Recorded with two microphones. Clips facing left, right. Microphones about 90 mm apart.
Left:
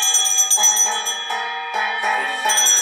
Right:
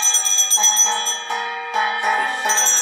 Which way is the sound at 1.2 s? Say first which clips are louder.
Even; 10° right (ahead or behind).